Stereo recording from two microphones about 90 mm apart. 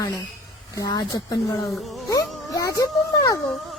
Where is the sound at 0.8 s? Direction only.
45° left (ahead or behind).